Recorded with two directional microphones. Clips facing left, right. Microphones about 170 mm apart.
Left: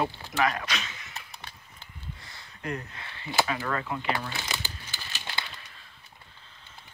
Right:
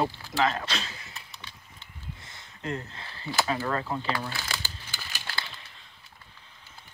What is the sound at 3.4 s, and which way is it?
Speech, 30° right (ahead or behind).